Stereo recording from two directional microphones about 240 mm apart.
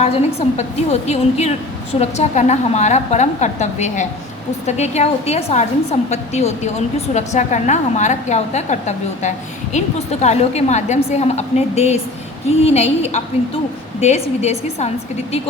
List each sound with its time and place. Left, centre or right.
0.0 s a woman's voice: left